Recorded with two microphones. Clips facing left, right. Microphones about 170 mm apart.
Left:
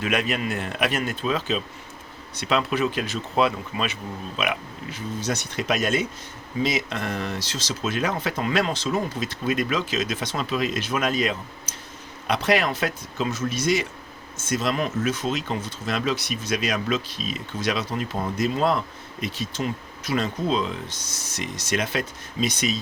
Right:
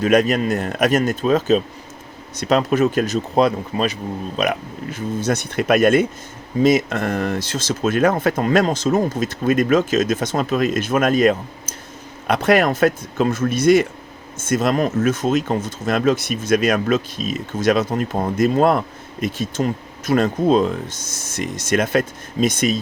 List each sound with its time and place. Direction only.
0.0 s speech: 40° right (ahead or behind)